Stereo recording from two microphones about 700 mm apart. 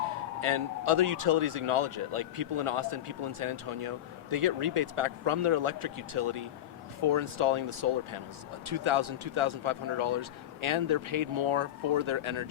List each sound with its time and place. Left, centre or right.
0.4 s speech: right